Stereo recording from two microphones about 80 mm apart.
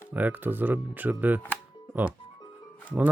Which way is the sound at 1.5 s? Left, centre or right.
Right.